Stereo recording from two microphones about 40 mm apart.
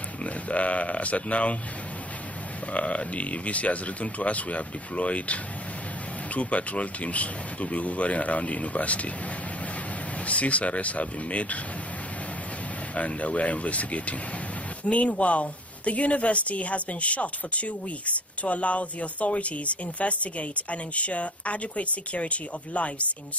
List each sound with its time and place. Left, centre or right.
0.2 s a woman's voice: left
2.7 s a woman's voice: left
10.2 s a woman's voice: left
12.9 s a woman's voice: left